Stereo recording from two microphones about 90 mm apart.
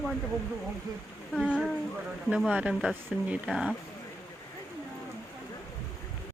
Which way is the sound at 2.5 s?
15° right (ahead or behind).